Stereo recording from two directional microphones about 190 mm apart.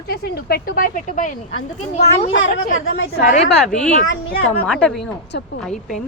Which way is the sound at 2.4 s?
90° left.